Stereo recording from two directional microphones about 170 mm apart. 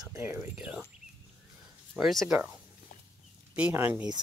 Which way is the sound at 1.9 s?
Centre (ahead or behind).